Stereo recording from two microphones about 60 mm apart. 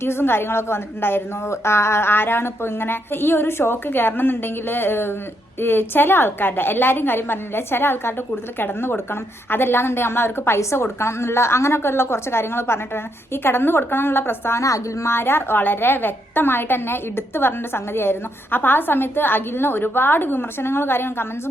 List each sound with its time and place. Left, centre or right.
0.0 s a woman's voice: left
14.6 s speech: left
15.1 s a woman's voice: left